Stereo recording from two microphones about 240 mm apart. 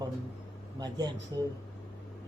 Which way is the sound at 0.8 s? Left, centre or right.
Centre.